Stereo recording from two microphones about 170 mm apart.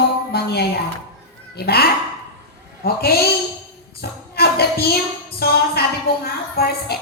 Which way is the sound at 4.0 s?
65° left (ahead or behind).